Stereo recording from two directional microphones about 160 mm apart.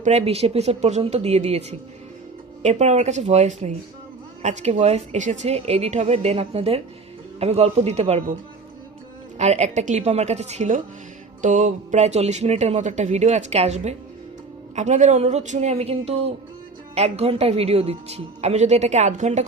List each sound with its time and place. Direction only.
0.0 s a woman's voice: 40° right (ahead or behind)
2.6 s a woman's voice: 45° right (ahead or behind)
9.4 s a woman's voice: 45° right (ahead or behind)